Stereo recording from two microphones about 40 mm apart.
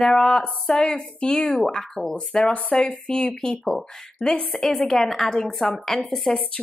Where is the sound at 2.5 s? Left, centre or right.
Left.